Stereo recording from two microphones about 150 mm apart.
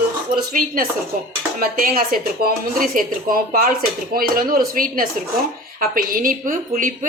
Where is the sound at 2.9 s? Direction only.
65° right (ahead or behind).